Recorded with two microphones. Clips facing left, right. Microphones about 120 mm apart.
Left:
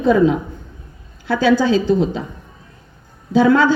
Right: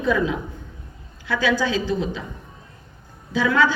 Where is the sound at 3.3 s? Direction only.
30° left (ahead or behind).